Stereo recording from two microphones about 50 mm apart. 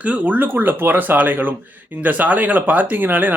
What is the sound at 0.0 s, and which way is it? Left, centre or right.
Speech, right.